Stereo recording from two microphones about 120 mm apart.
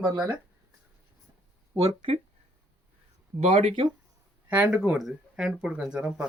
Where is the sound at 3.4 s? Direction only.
65° right (ahead or behind).